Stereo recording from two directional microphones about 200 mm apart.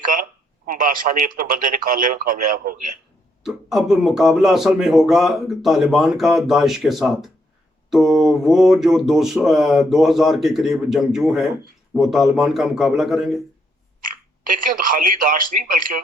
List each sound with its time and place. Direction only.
0.0 s speech: 45° right (ahead or behind)
3.4 s speech: centre (ahead or behind)
14.0 s speech: 45° right (ahead or behind)